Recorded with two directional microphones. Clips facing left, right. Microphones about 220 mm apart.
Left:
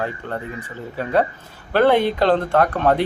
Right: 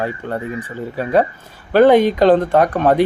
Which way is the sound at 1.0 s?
10° right (ahead or behind).